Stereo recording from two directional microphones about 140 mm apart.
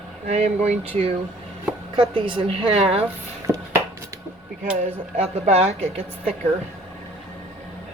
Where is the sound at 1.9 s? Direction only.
40° right (ahead or behind).